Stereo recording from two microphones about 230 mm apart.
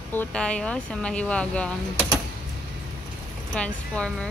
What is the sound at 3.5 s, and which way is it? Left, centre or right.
Speech, centre.